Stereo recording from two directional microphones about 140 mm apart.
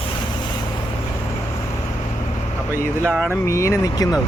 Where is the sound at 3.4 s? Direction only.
20° left (ahead or behind).